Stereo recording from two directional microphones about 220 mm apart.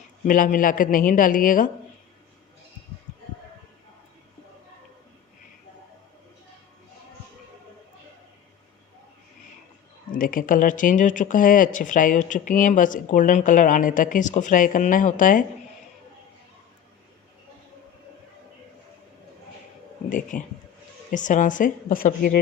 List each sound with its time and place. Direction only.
0.3 s speech: 40° left (ahead or behind)
10.1 s speech: 40° left (ahead or behind)
20.1 s speech: 35° left (ahead or behind)